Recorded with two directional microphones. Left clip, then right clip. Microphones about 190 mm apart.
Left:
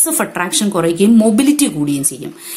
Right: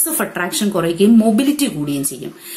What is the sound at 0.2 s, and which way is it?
A woman's voice, 35° left (ahead or behind).